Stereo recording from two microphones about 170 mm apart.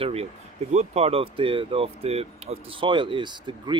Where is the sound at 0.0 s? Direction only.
35° right (ahead or behind).